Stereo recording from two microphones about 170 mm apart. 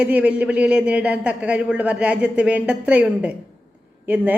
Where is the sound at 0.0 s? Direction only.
10° right (ahead or behind).